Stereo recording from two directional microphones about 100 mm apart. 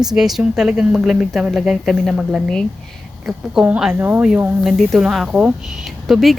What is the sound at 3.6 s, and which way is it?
Speech, 15° right (ahead or behind).